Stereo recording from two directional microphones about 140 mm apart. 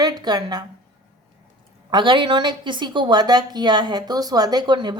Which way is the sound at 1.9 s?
35° right (ahead or behind).